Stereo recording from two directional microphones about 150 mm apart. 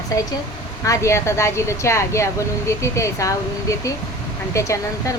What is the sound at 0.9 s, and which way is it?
A woman's voice, 20° left (ahead or behind).